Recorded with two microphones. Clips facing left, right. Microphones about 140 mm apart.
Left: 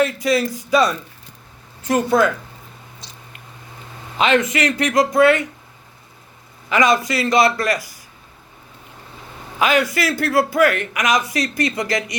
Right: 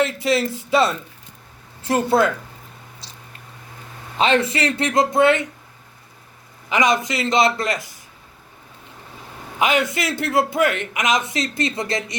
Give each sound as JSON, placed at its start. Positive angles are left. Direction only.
{"t": 0.0, "sound": "a man's voice", "side_deg": -25}
{"t": 2.0, "sound": "a man's voice", "side_deg": -30}
{"t": 4.2, "sound": "a man's voice", "side_deg": -30}
{"t": 6.7, "sound": "a man's voice", "side_deg": -20}
{"t": 9.6, "sound": "a man's voice", "side_deg": -20}